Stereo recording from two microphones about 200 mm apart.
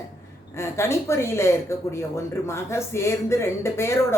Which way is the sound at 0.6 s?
15° left (ahead or behind).